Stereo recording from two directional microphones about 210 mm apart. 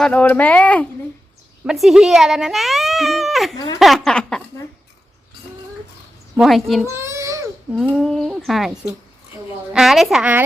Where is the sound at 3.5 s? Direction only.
20° left (ahead or behind).